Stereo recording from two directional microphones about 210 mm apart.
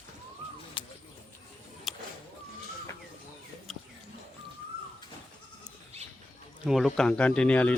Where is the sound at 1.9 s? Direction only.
Centre (ahead or behind).